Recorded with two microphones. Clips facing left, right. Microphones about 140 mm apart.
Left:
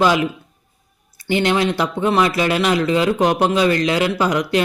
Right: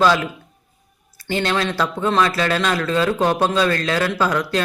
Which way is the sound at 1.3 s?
15° left (ahead or behind).